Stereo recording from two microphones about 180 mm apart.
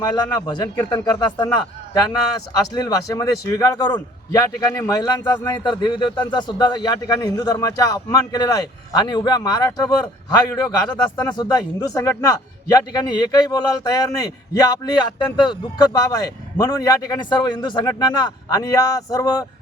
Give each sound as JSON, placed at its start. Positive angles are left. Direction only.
{"t": 0.0, "sound": "a man's voice", "side_deg": 20}
{"t": 2.6, "sound": "a man's voice", "side_deg": 20}